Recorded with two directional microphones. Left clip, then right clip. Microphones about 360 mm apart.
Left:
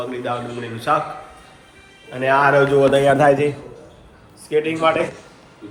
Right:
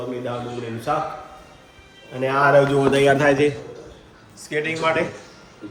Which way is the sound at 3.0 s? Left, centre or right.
Left.